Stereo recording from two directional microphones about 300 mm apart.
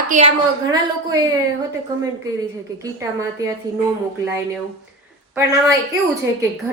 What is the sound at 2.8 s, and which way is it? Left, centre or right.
Speech, centre.